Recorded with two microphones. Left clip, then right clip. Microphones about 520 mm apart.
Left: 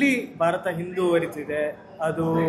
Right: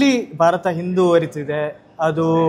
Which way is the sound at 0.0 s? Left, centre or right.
Right.